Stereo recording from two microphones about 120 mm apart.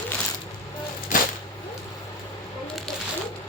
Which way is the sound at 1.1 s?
90° left.